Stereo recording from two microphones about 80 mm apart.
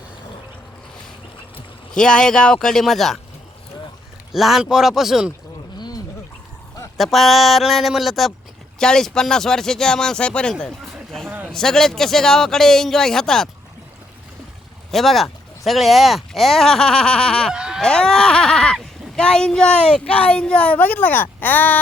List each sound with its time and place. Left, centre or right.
1.9 s speech: centre
4.3 s speech: centre
6.9 s speech: centre
11.3 s a sound: right
11.5 s speech: centre
14.8 s speech: centre
17.5 s a sound: centre
17.8 s speech: centre